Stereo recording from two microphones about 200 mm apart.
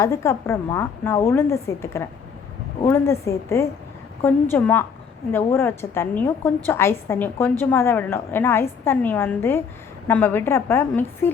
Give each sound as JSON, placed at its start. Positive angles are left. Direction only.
{"t": 0.0, "sound": "a woman's voice", "side_deg": 15}